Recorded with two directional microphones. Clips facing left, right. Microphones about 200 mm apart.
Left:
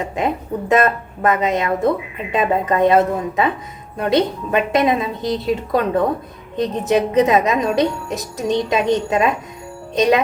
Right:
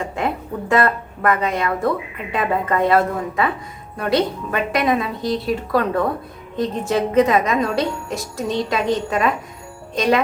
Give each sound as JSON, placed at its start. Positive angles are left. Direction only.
{"t": 0.0, "sound": "a woman's voice", "side_deg": 20}